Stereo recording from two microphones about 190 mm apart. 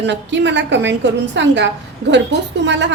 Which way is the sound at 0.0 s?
70° right (ahead or behind).